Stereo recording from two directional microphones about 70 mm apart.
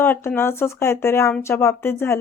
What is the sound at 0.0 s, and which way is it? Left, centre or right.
A woman's voice, left.